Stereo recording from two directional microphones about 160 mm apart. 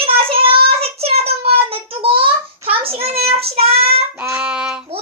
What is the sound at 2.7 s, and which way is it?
Child singing, 35° right (ahead or behind).